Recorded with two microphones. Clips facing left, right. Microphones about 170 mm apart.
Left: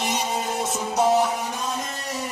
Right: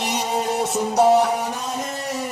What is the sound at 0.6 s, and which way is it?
Music, 65° right (ahead or behind).